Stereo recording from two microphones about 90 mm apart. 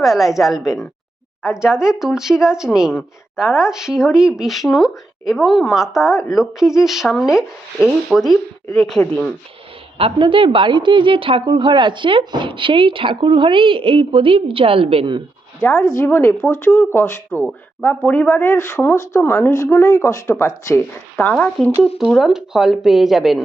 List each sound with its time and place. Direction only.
0.0 s speech: centre (ahead or behind)
10.0 s a woman's voice: 70° right (ahead or behind)
15.6 s speech: 25° left (ahead or behind)
21.2 s speech: 15° left (ahead or behind)
22.2 s speech: 5° right (ahead or behind)